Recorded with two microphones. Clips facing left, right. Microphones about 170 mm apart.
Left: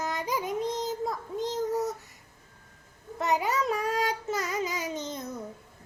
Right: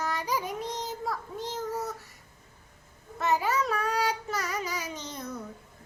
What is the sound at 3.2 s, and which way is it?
Child singing, 15° left (ahead or behind).